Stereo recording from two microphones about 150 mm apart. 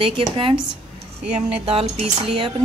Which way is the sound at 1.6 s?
40° right (ahead or behind).